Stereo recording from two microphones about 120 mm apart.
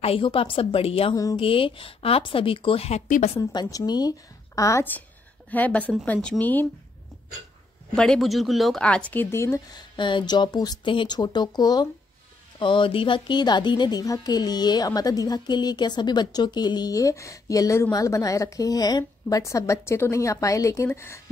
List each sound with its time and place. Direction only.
0.0 s speech: 50° left (ahead or behind); by 3.3 s 70° left (ahead or behind)
3.3 s a woman's voice: 30° left (ahead or behind)
5.5 s speech: 15° left (ahead or behind)
7.9 s speech: 5° left (ahead or behind); by 9.6 s 20° left (ahead or behind)
9.8 s a woman's voice: 40° left (ahead or behind); by 21.2 s 25° left (ahead or behind)